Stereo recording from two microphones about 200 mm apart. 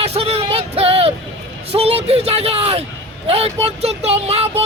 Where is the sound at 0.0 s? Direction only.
30° right (ahead or behind).